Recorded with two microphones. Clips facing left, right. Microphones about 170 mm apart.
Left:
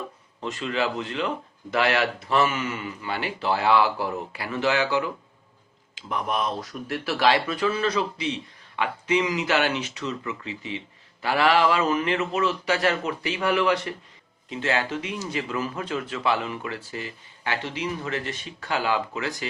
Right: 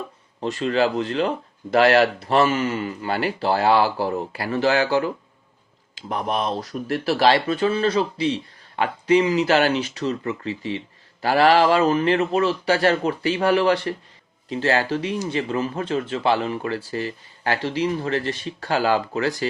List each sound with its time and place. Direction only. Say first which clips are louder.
0.6 s speech: right 6 dB; 35° right (ahead or behind)